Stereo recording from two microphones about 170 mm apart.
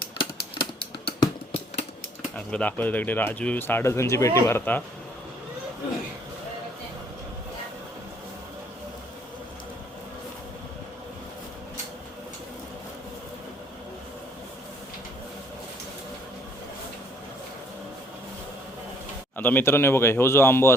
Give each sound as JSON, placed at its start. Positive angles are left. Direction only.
{"t": 0.6, "sound": "typing", "side_deg": 30}
{"t": 2.3, "sound": "speech", "side_deg": 10}
{"t": 19.4, "sound": "speech", "side_deg": 10}